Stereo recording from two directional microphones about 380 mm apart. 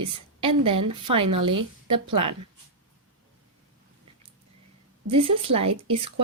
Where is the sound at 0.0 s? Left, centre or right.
Centre.